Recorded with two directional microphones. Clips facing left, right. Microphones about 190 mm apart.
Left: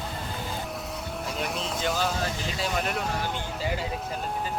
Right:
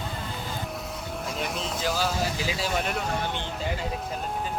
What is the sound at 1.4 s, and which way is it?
Speech, centre (ahead or behind).